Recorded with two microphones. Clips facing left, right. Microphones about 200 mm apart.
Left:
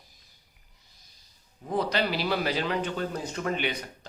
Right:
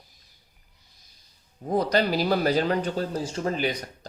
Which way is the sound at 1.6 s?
40° right (ahead or behind).